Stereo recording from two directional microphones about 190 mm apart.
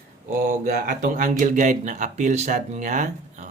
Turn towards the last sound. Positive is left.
turn(degrees=-40)  # may be behind; listen again after turning